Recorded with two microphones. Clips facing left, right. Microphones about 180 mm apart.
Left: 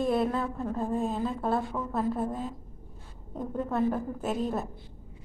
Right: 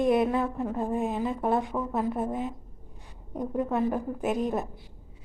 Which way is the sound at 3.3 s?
15° right (ahead or behind).